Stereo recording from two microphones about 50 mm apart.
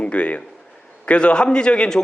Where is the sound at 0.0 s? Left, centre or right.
Left.